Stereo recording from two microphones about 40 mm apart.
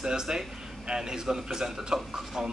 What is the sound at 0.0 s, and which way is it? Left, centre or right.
A man's voice, centre.